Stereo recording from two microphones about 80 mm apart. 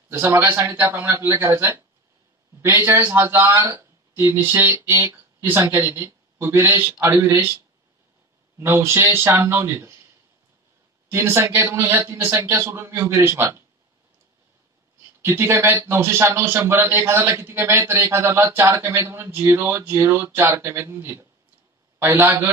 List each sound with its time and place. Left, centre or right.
0.5 s a man's voice: right
11.1 s a man's voice: right
15.2 s a man's voice: right
21.9 s a man's voice: right